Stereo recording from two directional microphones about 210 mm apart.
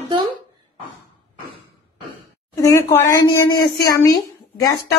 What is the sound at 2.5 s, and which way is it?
Speech, 15° left (ahead or behind).